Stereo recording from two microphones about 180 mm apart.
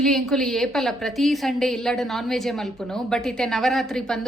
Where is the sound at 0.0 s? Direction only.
Centre (ahead or behind).